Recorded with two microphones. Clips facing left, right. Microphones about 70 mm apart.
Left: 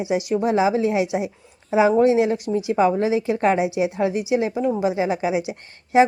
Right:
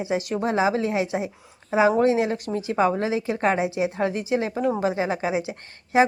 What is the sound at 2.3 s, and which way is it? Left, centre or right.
Speech, right.